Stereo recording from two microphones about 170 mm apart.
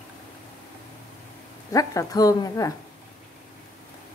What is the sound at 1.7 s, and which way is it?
A woman's voice, 20° left (ahead or behind).